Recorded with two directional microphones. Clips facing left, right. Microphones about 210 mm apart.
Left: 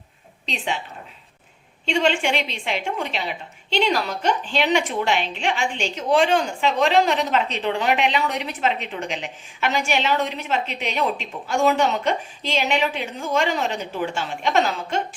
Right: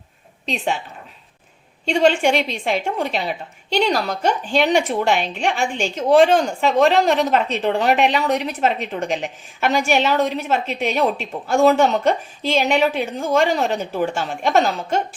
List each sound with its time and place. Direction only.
0.4 s a woman's voice: 40° right (ahead or behind)
1.8 s a woman's voice: 40° right (ahead or behind)